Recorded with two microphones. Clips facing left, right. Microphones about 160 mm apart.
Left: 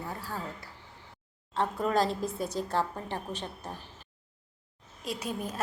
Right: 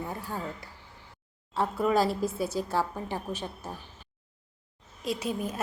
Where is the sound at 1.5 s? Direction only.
5° right (ahead or behind).